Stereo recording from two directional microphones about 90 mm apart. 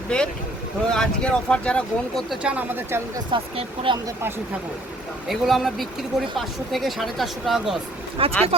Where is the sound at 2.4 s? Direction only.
15° right (ahead or behind).